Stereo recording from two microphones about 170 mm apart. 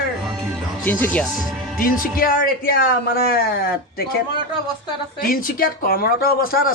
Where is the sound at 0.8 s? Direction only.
10° left (ahead or behind).